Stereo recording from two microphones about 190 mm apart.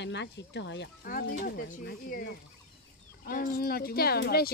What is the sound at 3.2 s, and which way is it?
Speech, 50° left (ahead or behind).